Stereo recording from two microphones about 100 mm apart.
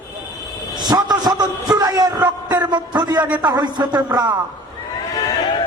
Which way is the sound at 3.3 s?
45° right (ahead or behind).